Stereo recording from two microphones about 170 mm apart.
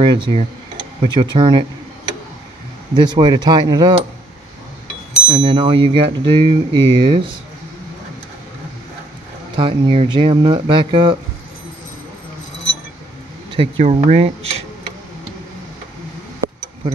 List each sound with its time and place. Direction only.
0.0 s speech: 30° right (ahead or behind)
2.9 s speech: 25° right (ahead or behind)
5.3 s speech: 30° right (ahead or behind)
9.6 s speech: 30° right (ahead or behind)
13.5 s speech: 35° right (ahead or behind)